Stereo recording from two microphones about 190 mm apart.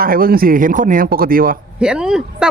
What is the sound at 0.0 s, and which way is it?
Speech, 50° right (ahead or behind).